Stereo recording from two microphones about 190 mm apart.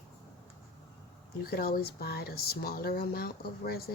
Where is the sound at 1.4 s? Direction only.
55° left (ahead or behind).